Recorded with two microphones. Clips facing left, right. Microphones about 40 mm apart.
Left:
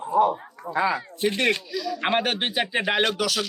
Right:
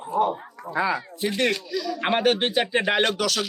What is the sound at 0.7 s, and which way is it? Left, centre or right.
Speech, left.